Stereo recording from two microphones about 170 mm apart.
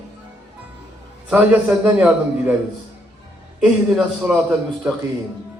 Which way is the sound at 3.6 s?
5° right (ahead or behind).